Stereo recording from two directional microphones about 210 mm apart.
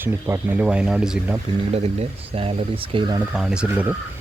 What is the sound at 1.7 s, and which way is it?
Speech, 30° right (ahead or behind).